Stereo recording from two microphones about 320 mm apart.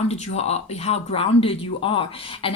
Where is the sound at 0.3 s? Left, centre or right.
Centre.